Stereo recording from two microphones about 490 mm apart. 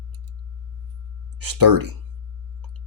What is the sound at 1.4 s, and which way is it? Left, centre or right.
Speech, right.